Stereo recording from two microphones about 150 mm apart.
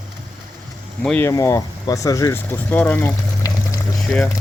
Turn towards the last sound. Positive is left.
turn(degrees=5)  # may be behind; listen again after turning